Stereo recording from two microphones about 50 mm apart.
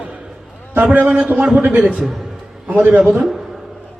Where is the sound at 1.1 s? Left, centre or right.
Right.